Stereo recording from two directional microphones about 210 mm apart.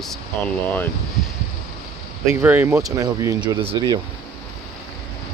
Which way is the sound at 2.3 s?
10° right (ahead or behind).